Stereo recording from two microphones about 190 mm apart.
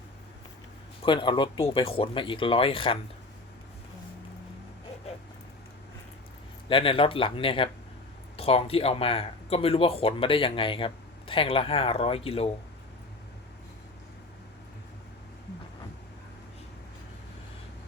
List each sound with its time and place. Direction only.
1.0 s speech: 25° left (ahead or behind)
6.7 s speech: 30° left (ahead or behind)